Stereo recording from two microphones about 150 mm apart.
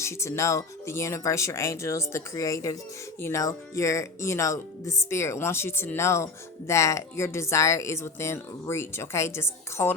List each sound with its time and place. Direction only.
0.0 s speech: 20° left (ahead or behind)